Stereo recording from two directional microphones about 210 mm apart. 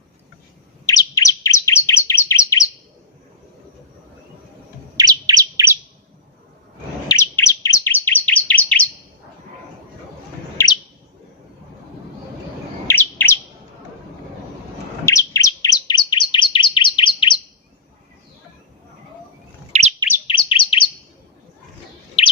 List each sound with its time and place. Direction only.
0.9 s bird: 15° left (ahead or behind)
4.9 s chirp: 20° right (ahead or behind)
7.1 s bird: 15° left (ahead or behind)
10.6 s chirp: 15° left (ahead or behind)
12.9 s chirp: 10° left (ahead or behind)
15.0 s bird: 15° left (ahead or behind)
19.7 s chirp: 35° right (ahead or behind)
20.2 s chirp: 25° left (ahead or behind)
22.2 s bird: 30° left (ahead or behind)